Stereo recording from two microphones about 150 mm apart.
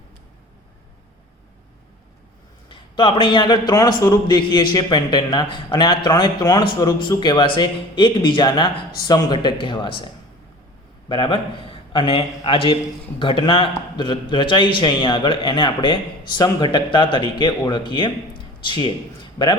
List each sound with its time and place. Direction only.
2.6 s a man's voice: 35° left (ahead or behind)
11.1 s a man's voice: 35° left (ahead or behind)